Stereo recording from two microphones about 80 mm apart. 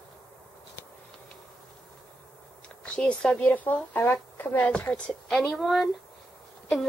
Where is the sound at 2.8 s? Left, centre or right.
Centre.